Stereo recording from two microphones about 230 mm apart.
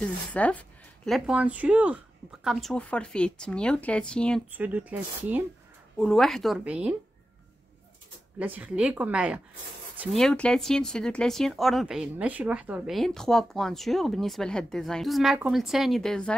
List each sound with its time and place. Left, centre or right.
0.0 s speech: centre
4.5 s speech: centre
8.4 s speech: centre